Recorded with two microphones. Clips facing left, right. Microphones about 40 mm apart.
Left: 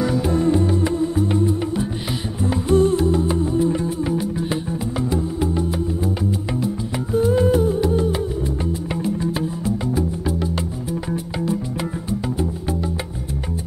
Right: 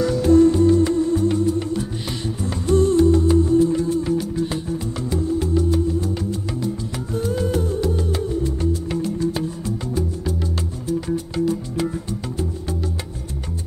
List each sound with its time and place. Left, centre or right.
0.0 s music: centre